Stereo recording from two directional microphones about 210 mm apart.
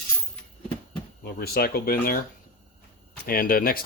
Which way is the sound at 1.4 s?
50° left (ahead or behind).